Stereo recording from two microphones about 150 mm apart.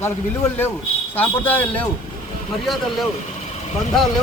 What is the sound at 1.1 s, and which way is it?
Speech, 10° left (ahead or behind).